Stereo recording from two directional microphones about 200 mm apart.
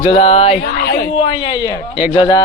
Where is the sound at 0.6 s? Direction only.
45° left (ahead or behind); by 2.4 s 20° left (ahead or behind).